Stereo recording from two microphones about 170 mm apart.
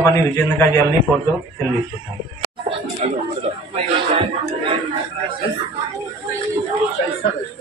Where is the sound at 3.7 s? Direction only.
30° right (ahead or behind).